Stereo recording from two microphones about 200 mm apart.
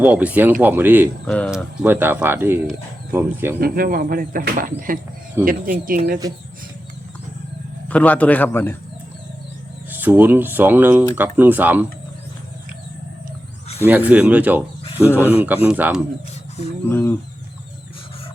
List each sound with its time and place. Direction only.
0.0 s speech: 5° right (ahead or behind)
3.6 s speech: 45° right (ahead or behind)
5.4 s speech: 10° right (ahead or behind)
7.9 s a man's voice: 10° left (ahead or behind)
9.9 s speech: 10° right (ahead or behind)
13.8 s speech: 10° right (ahead or behind)
15.0 s a man's voice: 10° left (ahead or behind)
15.4 s speech: 10° right (ahead or behind)
16.9 s a man's voice: 10° left (ahead or behind)